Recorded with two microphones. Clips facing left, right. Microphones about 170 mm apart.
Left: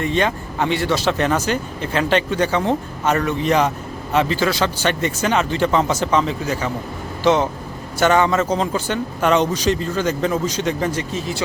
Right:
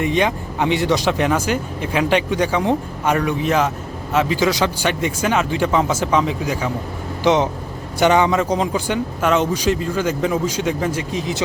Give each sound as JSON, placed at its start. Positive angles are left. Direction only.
{"t": 0.0, "sound": "a man's voice", "side_deg": -15}
{"t": 4.4, "sound": "speech", "side_deg": -15}